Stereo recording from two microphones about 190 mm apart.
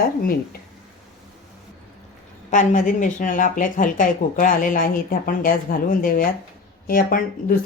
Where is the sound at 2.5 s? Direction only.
40° left (ahead or behind).